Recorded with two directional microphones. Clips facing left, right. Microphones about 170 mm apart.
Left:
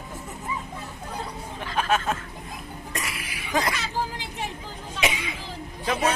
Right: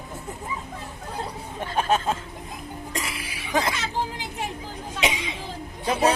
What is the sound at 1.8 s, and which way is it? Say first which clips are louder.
Speech: right 1 dB; 30° right (ahead or behind).